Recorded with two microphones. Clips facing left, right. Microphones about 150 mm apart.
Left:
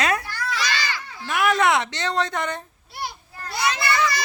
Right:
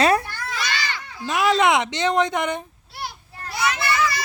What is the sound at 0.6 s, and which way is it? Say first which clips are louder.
Speech: left 1 dB; 20° right (ahead or behind).